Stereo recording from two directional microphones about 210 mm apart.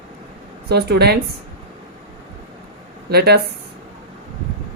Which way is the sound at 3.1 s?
50° right (ahead or behind).